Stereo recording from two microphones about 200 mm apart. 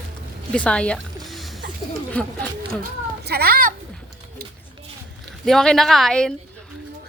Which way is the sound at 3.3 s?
50° right (ahead or behind).